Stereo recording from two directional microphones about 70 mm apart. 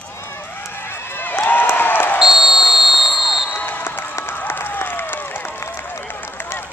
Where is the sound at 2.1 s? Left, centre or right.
Centre.